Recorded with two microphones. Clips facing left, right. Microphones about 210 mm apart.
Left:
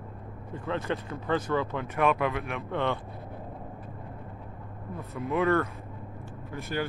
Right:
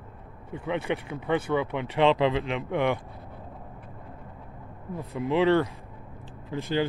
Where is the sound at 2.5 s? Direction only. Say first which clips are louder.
Right 4 dB; 15° right (ahead or behind).